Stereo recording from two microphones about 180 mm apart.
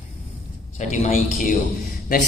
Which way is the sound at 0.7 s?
40° left (ahead or behind).